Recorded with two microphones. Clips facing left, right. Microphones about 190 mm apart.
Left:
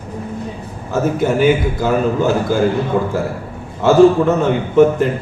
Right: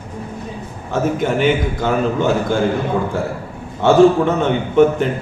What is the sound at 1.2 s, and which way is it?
A man's voice, 5° left (ahead or behind).